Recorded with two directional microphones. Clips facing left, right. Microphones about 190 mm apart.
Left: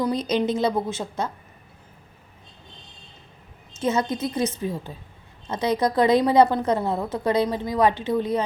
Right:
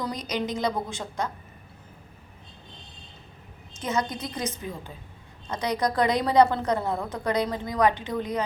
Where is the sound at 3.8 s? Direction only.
25° left (ahead or behind).